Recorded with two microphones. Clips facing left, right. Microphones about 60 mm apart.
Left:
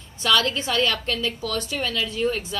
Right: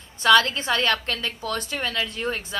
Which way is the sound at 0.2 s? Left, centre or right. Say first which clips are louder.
Right 4 dB; right.